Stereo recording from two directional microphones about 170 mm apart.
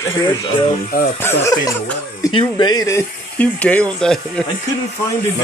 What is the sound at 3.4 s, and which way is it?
Speech, 5° left (ahead or behind).